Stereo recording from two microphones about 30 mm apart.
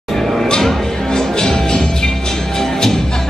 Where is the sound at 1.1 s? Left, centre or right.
Left.